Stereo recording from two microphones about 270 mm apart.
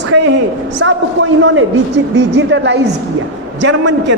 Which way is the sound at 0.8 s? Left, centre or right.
Right.